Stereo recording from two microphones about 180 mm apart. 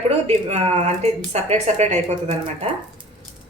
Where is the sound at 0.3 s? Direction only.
30° right (ahead or behind).